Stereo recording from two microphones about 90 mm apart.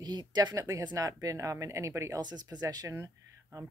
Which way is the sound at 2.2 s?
50° right (ahead or behind).